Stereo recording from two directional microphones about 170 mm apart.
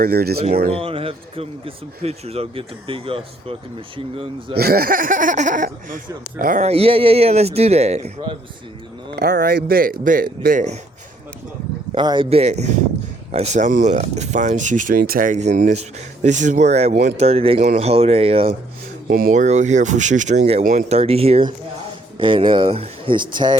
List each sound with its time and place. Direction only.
0.0 s speech: 65° right (ahead or behind)
0.7 s a man's voice: 35° right (ahead or behind)
4.5 s speech: 65° right (ahead or behind)
6.7 s a man's voice: 35° right (ahead or behind)
9.1 s speech: 70° right (ahead or behind); by 10.8 s 50° right (ahead or behind)
11.9 s a man's voice: 25° right (ahead or behind)
19.0 s speech: 60° right (ahead or behind); by 23.6 s 25° right (ahead or behind)